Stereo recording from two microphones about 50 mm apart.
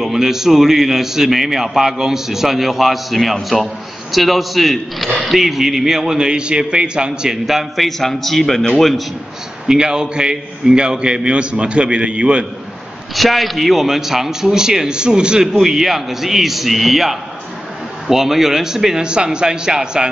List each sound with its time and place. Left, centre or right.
0.0 s a man's voice: centre
9.7 s a man's voice: centre
13.1 s a man's voice: centre